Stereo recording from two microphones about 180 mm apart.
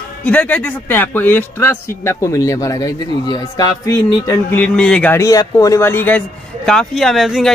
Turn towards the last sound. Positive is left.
turn(degrees=0)  # may be behind; listen again after turning